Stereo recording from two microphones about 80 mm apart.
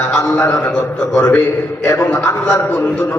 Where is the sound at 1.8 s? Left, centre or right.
Left.